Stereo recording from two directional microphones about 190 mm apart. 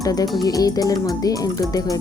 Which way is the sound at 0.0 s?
20° left (ahead or behind).